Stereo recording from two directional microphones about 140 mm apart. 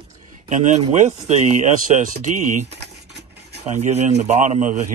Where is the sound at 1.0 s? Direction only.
55° right (ahead or behind).